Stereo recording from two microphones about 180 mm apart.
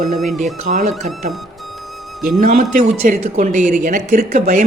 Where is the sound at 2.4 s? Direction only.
40° right (ahead or behind).